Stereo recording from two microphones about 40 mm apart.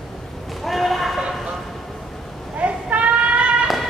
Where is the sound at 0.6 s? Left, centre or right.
Centre.